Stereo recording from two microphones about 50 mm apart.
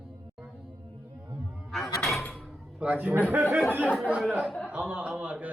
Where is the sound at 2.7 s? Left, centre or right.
Right.